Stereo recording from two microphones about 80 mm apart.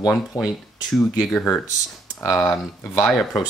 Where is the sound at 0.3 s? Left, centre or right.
Left.